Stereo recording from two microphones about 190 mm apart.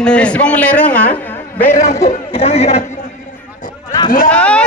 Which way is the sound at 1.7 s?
35° left (ahead or behind).